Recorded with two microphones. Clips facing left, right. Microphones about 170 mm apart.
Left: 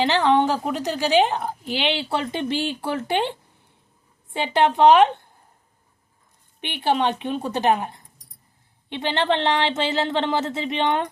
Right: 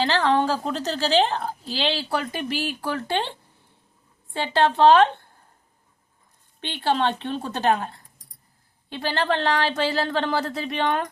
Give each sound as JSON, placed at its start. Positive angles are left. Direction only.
{"t": 0.0, "sound": "a woman's voice", "side_deg": 20}
{"t": 6.6, "sound": "a woman's voice", "side_deg": 20}